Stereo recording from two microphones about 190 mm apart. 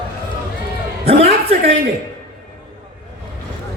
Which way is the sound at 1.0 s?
30° right (ahead or behind).